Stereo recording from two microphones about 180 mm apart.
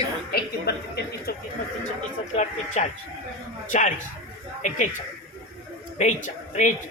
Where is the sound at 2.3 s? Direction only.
40° left (ahead or behind).